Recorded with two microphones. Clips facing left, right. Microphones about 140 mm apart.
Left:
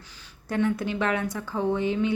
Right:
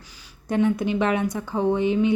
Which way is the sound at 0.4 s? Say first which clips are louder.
Right 4 dB; 20° right (ahead or behind).